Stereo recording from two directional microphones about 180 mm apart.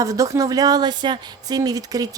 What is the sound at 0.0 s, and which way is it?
Speech, 20° right (ahead or behind).